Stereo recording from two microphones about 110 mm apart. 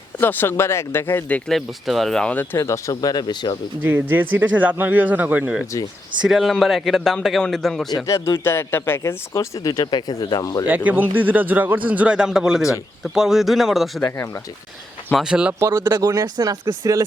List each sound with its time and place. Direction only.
0.2 s speech: 20° left (ahead or behind)
1.5 s speech: centre (ahead or behind); by 3.6 s 40° left (ahead or behind)
3.8 s a man's voice: 20° right (ahead or behind); by 7.9 s 5° left (ahead or behind)
8.0 s speech: 25° left (ahead or behind)
10.7 s a man's voice: 15° right (ahead or behind)
15.2 s speech: 10° right (ahead or behind)
15.5 s speech: 25° right (ahead or behind)